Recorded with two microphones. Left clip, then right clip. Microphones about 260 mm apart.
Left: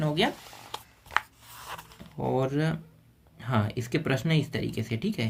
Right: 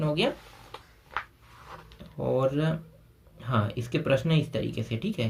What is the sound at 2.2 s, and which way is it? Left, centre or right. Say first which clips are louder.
Speech: right 2 dB; centre.